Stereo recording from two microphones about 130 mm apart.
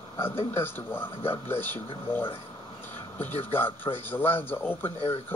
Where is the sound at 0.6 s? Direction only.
15° left (ahead or behind).